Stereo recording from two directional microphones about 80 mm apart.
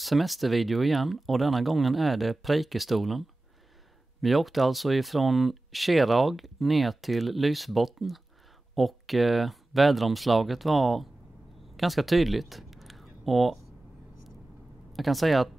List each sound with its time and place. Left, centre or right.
0.0 s speech: centre
11.7 s a sound: centre
14.9 s speech: centre